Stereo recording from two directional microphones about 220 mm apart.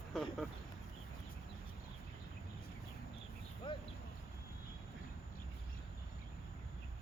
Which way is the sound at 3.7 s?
20° left (ahead or behind).